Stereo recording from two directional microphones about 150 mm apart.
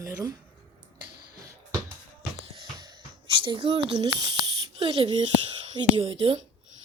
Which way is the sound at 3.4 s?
35° right (ahead or behind).